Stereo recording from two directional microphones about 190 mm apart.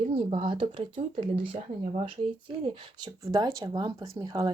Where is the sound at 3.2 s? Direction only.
20° right (ahead or behind).